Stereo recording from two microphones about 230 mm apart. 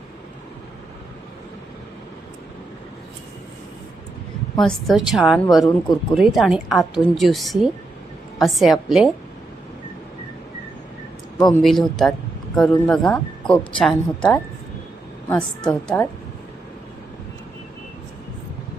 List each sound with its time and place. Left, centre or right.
4.5 s a woman's voice: centre
11.3 s speech: centre
11.6 s a woman's voice: centre